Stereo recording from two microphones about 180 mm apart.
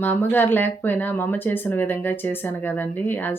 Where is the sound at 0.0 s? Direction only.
10° left (ahead or behind).